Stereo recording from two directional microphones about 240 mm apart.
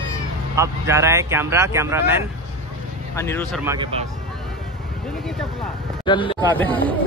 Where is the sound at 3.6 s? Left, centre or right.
Centre.